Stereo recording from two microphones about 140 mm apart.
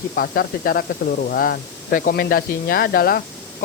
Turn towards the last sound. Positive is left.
turn(degrees=90)